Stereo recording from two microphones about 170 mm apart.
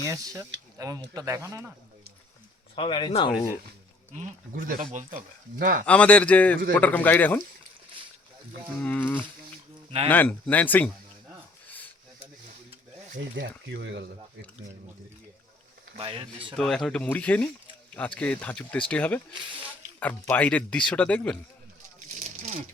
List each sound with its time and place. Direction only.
0.0 s speech: 20° right (ahead or behind)
2.7 s speech: 30° left (ahead or behind)
4.1 s speech: 45° right (ahead or behind)
5.8 s speech: 5° left (ahead or behind)
8.8 s speech: 10° left (ahead or behind)
13.1 s speech: 90° right; by 14.1 s 75° right (ahead or behind)
16.0 s speech: 30° right (ahead or behind)
16.6 s speech: 5° left (ahead or behind)